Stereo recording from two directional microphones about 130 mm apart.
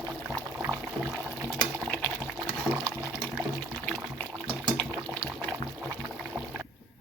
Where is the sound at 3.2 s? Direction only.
10° right (ahead or behind).